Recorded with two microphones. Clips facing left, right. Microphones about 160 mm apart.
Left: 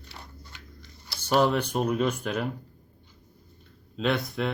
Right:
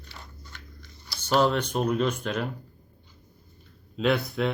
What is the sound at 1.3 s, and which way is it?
Speech, 10° left (ahead or behind).